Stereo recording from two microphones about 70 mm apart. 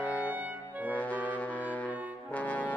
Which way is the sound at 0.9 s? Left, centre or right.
Left.